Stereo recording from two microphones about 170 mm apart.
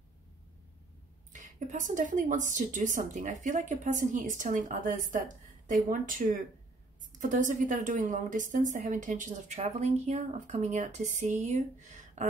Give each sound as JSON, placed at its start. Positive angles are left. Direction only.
{"t": 1.3, "sound": "speech", "side_deg": -50}
{"t": 9.6, "sound": "speech", "side_deg": -40}